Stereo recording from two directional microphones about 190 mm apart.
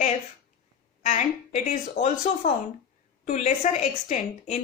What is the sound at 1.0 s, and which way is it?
A woman's voice, 35° left (ahead or behind).